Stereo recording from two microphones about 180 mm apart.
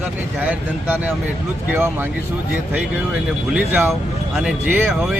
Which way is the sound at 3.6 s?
10° right (ahead or behind).